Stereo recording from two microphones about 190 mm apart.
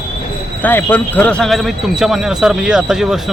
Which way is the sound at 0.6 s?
10° left (ahead or behind).